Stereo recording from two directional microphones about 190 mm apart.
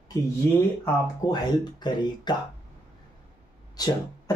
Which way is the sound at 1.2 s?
20° left (ahead or behind).